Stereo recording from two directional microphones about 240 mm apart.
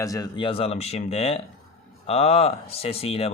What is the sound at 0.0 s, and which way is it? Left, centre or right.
Speech, centre.